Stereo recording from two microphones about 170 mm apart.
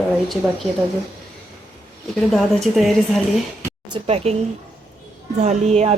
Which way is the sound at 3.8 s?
25° right (ahead or behind).